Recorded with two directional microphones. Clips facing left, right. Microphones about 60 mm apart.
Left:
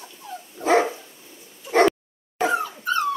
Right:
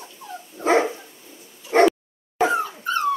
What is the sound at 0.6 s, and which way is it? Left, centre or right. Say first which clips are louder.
Dog: even; right.